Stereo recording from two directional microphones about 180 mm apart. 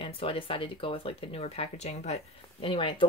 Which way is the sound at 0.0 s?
30° left (ahead or behind).